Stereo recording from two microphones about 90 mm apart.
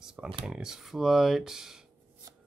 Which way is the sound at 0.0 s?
5° right (ahead or behind).